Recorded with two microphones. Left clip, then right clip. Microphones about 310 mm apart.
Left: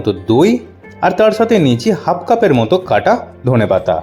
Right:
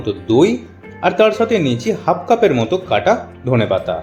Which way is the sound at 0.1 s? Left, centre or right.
Left.